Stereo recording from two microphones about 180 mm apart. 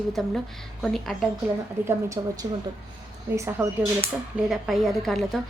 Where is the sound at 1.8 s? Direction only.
15° right (ahead or behind).